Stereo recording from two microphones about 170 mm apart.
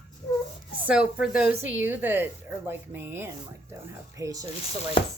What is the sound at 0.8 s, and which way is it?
A woman's voice, 5° right (ahead or behind).